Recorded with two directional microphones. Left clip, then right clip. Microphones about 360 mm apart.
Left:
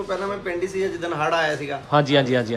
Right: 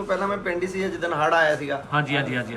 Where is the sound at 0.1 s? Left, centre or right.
Centre.